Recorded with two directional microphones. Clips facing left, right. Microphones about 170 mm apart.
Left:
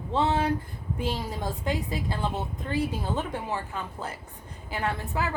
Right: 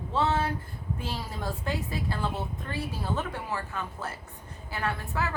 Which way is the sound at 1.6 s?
15° left (ahead or behind).